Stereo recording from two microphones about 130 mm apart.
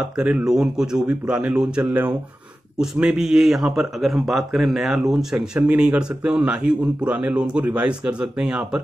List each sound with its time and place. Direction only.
0.2 s a man's voice: 10° right (ahead or behind)